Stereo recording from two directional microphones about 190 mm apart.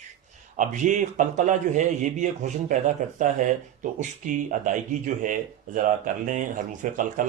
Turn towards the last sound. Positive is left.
turn(degrees=-40)  # may be behind; listen again after turning